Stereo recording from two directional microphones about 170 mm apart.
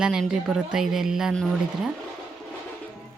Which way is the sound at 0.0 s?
Centre (ahead or behind).